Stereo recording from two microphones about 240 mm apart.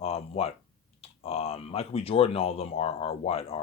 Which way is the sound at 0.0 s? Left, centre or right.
Left.